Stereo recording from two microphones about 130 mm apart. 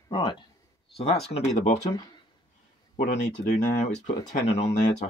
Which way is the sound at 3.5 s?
85° left.